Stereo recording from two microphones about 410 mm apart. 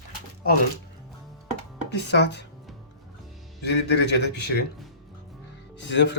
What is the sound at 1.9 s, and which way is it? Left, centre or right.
Speech, left.